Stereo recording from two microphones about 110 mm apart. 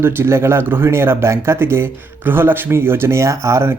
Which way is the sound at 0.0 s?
20° right (ahead or behind).